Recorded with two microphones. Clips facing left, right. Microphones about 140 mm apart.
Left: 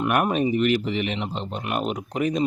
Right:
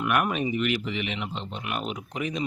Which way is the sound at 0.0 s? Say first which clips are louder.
Left 4 dB; 35° left (ahead or behind).